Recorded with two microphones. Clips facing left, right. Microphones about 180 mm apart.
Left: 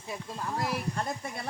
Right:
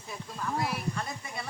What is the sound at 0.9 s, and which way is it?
Speech, 45° left (ahead or behind).